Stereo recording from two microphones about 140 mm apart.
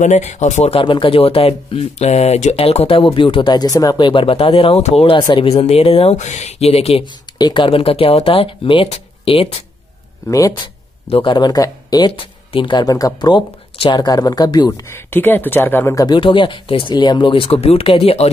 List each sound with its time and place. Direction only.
0.0 s speech: 55° left (ahead or behind)
0.7 s speech: 35° left (ahead or behind)
7.3 s speech: 35° left (ahead or behind)
10.2 s speech: 25° left (ahead or behind)
11.1 s speech: 45° left (ahead or behind)
11.3 s speech: 30° left (ahead or behind)
14.7 s speech: 15° left (ahead or behind)
16.2 s speech: 35° left (ahead or behind)